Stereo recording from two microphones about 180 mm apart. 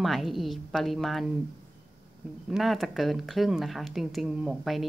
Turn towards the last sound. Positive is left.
turn(degrees=0)  # may be behind; listen again after turning